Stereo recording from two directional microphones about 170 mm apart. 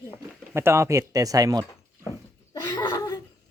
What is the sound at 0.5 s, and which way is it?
Speech, 15° right (ahead or behind).